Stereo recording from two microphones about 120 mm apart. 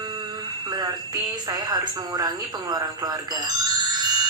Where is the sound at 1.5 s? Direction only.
35° right (ahead or behind).